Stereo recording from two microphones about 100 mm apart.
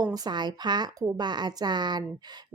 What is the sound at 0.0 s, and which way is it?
A woman's voice, 45° right (ahead or behind).